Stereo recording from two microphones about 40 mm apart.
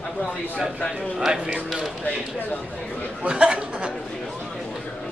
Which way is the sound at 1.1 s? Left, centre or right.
Centre.